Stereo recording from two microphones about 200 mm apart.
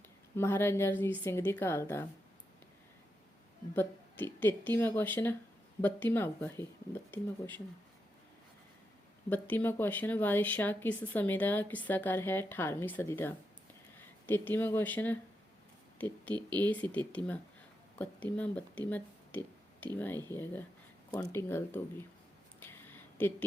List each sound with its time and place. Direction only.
0.3 s speech: 10° left (ahead or behind)
3.8 s speech: 10° left (ahead or behind)
9.3 s speech: 10° left (ahead or behind)
16.5 s speech: 20° right (ahead or behind)
16.8 s speech: 10° left (ahead or behind)
22.6 s a sound: 10° left (ahead or behind)